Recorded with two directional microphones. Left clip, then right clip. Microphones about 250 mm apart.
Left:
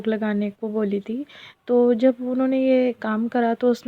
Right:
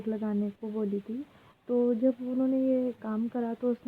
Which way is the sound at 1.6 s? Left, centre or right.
Left.